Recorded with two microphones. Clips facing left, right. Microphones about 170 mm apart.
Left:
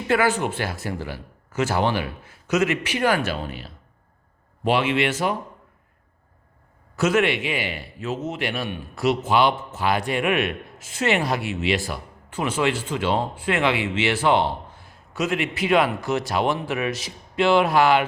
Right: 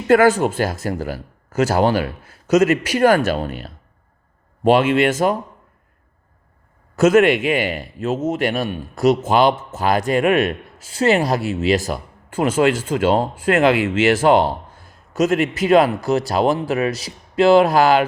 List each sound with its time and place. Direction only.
0.1 s a man's voice: 45° right (ahead or behind)
6.9 s a man's voice: 45° right (ahead or behind)